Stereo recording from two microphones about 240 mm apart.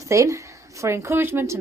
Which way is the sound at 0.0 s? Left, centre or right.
Centre.